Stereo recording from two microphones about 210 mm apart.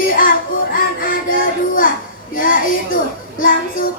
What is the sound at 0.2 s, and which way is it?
Music, 40° left (ahead or behind).